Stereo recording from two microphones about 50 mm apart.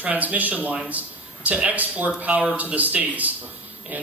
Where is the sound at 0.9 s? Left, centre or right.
Right.